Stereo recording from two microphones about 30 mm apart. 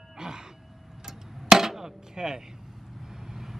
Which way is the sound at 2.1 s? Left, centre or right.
Right.